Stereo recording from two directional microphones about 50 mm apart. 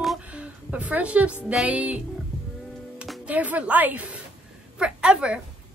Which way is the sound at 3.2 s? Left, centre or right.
Right.